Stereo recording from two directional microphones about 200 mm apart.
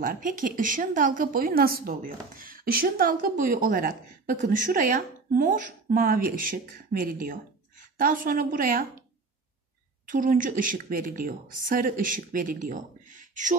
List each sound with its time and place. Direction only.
0.0 s a woman's voice: 45° right (ahead or behind)
10.0 s a woman's voice: 45° right (ahead or behind)